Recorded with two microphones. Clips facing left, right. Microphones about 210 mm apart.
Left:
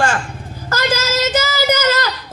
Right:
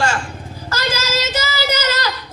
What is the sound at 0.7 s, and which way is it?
Child singing, 50° left (ahead or behind).